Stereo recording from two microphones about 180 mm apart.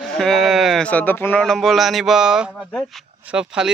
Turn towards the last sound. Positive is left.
turn(degrees=-5)  # may be behind; listen again after turning